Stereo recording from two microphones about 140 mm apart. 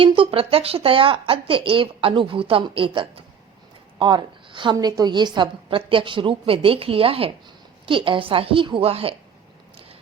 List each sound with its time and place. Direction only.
0.0 s a woman's voice: 40° right (ahead or behind)